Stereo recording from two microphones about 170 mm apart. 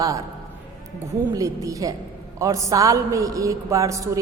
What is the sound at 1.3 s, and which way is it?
A man's voice, 20° right (ahead or behind).